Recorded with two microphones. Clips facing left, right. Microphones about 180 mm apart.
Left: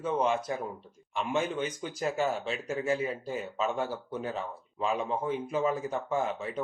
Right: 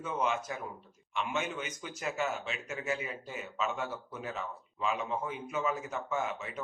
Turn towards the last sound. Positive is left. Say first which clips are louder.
# left 4 dB
turn(degrees=30)  # may be behind; listen again after turning